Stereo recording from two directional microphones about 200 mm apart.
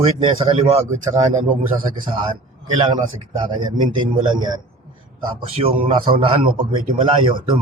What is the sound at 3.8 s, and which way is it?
A man's voice, 25° right (ahead or behind).